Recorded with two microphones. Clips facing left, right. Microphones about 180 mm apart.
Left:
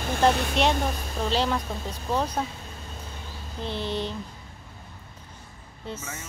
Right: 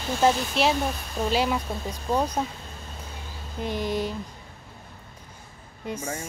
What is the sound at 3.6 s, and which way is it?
Speech, 10° right (ahead or behind).